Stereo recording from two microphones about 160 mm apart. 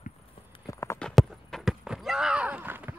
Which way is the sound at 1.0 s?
Centre (ahead or behind).